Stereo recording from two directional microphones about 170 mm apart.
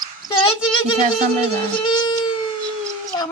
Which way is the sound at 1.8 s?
25° left (ahead or behind).